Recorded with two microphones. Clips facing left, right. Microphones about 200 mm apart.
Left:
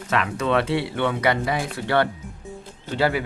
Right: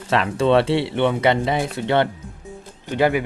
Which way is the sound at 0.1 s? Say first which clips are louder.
Right 5 dB; 30° right (ahead or behind).